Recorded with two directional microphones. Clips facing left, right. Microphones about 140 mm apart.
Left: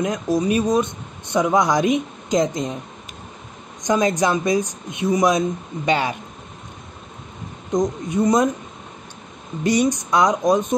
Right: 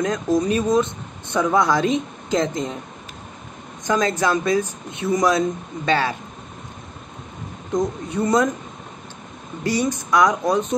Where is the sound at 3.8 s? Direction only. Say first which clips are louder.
Left 2 dB; 15° left (ahead or behind).